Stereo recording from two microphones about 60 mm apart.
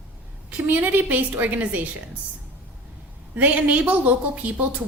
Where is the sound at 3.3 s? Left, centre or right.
Right.